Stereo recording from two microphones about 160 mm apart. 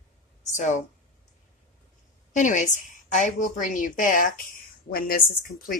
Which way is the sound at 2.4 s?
50° left (ahead or behind).